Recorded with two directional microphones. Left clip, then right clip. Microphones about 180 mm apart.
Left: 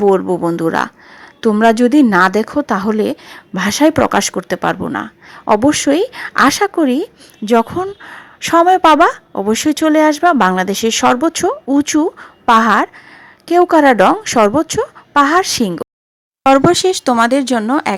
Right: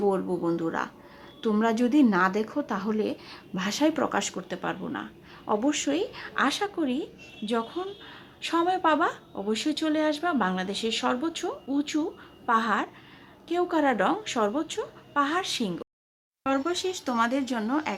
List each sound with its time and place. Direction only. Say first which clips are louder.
0.0 s a woman's voice: left 14 dB; 40° left (ahead or behind)